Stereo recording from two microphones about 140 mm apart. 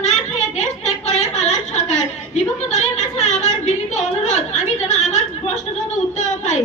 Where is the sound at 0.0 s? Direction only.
55° left (ahead or behind).